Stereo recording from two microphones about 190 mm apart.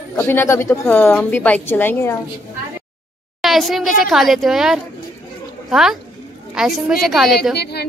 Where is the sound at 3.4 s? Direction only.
Centre (ahead or behind).